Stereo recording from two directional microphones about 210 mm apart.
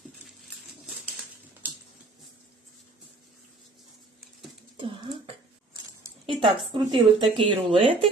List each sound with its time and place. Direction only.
4.8 s throat clearing: 25° right (ahead or behind)
6.2 s a sound: 25° right (ahead or behind)
6.7 s speech: 25° right (ahead or behind)